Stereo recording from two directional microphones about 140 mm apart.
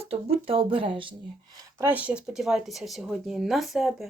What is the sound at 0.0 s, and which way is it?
Speech, 45° right (ahead or behind).